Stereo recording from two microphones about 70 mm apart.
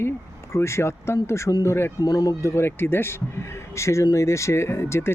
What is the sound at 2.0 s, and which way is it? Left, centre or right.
Speech, left.